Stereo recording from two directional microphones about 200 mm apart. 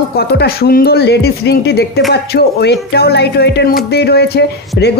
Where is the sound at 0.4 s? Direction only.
50° left (ahead or behind).